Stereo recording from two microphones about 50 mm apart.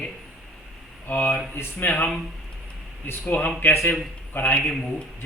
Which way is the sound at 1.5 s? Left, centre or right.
Left.